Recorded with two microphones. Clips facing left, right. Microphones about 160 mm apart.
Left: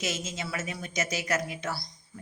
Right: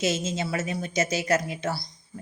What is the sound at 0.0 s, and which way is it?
Speech, 30° right (ahead or behind).